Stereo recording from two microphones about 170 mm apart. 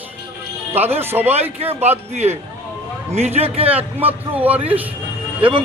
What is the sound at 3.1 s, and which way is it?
Speech, 40° right (ahead or behind).